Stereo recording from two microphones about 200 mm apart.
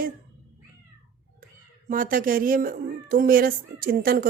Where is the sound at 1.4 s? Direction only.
45° right (ahead or behind).